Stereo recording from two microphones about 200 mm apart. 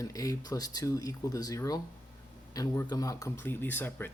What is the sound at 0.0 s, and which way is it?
Speech, 15° left (ahead or behind).